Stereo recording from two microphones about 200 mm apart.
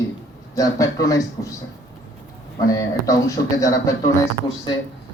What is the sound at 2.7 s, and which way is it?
Speech, 15° left (ahead or behind).